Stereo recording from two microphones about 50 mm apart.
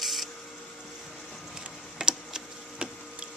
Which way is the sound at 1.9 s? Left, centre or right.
Centre.